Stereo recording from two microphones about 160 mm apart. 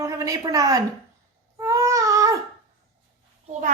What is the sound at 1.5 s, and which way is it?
Baby cry, 20° right (ahead or behind).